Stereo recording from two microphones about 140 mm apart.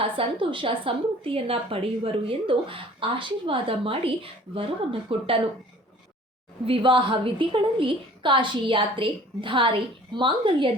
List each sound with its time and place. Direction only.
0.0 s a woman's voice: 40° right (ahead or behind)
6.7 s a woman's voice: 35° right (ahead or behind)